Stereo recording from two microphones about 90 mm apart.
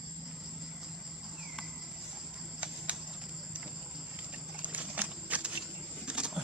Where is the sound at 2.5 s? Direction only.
10° right (ahead or behind).